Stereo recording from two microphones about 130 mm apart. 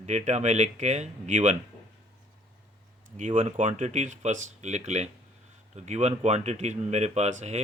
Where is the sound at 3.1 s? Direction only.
65° right (ahead or behind).